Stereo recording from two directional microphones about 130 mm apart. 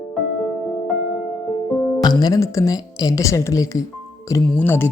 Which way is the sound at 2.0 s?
30° left (ahead or behind).